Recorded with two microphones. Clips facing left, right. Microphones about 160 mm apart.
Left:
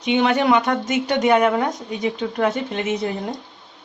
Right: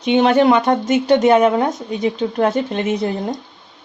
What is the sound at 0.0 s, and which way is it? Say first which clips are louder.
Speech: right 5 dB; 35° right (ahead or behind).